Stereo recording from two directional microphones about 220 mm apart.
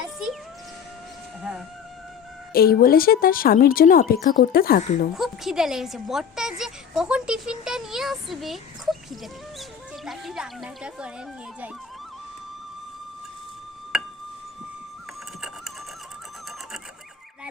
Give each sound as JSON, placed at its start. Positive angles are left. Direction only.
{"t": 0.0, "sound": "music", "side_deg": -5}
{"t": 1.4, "sound": "a sound", "side_deg": -5}
{"t": 2.5, "sound": "speech", "side_deg": 45}
{"t": 5.1, "sound": "a woman's voice", "side_deg": 0}
{"t": 10.1, "sound": "a woman's voice", "side_deg": 0}
{"t": 13.9, "sound": "music", "side_deg": 0}